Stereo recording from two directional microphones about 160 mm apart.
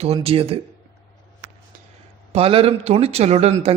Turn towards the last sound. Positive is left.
turn(degrees=-40)  # may be behind; listen again after turning